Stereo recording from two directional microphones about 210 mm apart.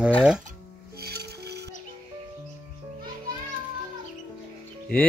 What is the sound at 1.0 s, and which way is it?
Music, 50° right (ahead or behind).